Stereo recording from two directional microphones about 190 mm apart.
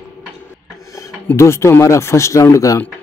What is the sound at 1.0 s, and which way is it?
Speech, 15° left (ahead or behind).